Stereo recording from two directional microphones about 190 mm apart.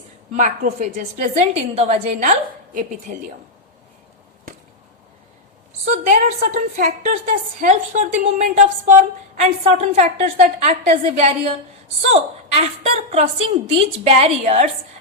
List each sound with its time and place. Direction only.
0.3 s a woman's voice: 45° right (ahead or behind)
5.8 s a woman's voice: 40° right (ahead or behind)